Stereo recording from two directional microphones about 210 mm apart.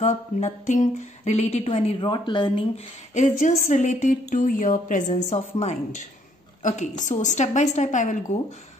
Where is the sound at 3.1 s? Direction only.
35° left (ahead or behind).